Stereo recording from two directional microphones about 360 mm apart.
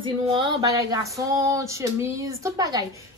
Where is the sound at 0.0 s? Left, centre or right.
Centre.